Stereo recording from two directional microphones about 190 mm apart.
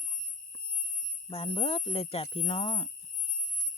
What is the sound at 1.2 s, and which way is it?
Speech, 30° left (ahead or behind).